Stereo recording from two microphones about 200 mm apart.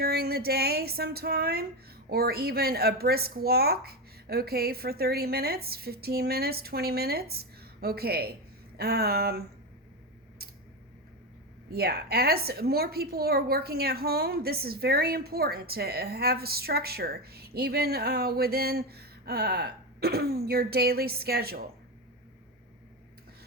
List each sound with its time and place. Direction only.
0.0 s a woman's voice: 50° right (ahead or behind)
11.7 s a woman's voice: 50° right (ahead or behind)